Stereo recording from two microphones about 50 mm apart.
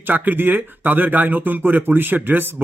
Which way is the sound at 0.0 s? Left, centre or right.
Right.